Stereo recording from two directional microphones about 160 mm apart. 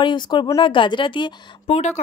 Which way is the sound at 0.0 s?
30° left (ahead or behind).